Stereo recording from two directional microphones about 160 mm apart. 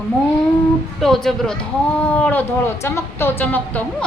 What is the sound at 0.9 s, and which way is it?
Speech, centre (ahead or behind).